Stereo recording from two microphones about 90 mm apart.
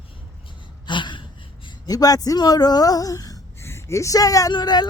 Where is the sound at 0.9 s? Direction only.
60° left (ahead or behind).